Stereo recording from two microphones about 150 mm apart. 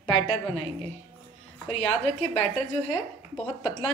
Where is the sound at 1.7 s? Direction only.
40° left (ahead or behind).